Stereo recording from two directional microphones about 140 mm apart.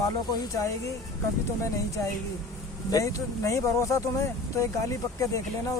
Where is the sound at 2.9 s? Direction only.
25° left (ahead or behind).